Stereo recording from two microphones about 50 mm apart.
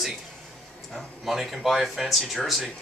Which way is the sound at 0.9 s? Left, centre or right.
Centre.